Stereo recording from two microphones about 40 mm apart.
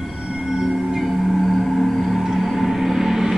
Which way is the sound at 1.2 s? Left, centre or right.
Centre.